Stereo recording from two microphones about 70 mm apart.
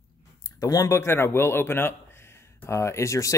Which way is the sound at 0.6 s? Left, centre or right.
Left.